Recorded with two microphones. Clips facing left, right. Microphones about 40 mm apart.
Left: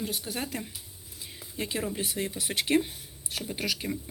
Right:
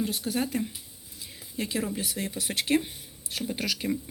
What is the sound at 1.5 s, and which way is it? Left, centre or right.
Speech, centre.